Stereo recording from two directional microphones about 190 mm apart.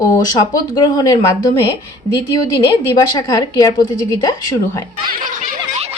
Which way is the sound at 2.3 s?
20° left (ahead or behind).